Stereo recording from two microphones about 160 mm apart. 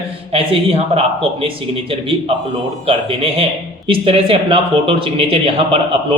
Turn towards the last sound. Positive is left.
turn(degrees=-35)  # may be behind; listen again after turning